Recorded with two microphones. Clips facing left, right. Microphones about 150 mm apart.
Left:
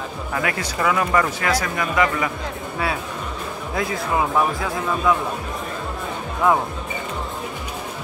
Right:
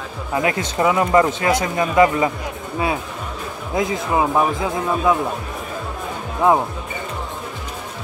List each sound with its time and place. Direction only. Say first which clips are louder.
0.3 s speech: right 5 dB; 20° right (ahead or behind)
3.7 s speech: right 3 dB; 20° right (ahead or behind)
6.4 s speech: right 3 dB; 20° right (ahead or behind)